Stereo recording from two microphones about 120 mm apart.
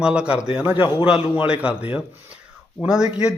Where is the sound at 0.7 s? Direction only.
45° left (ahead or behind).